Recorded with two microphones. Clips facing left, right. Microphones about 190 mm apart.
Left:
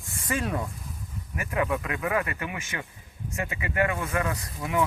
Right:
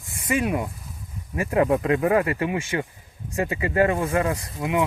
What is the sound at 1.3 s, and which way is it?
Speech, 30° right (ahead or behind).